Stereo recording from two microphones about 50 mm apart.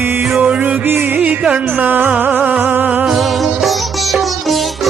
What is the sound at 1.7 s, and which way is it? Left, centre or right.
Music, right.